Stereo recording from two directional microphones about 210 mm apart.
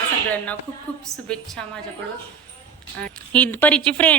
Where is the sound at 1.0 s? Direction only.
5° left (ahead or behind).